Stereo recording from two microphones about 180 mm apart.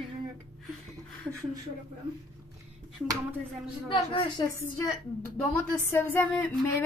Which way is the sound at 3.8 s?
30° left (ahead or behind).